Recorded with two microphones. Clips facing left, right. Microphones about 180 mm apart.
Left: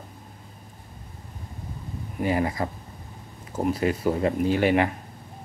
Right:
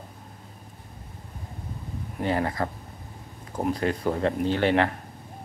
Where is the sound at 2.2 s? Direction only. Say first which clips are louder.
Left 1 dB; 10° left (ahead or behind).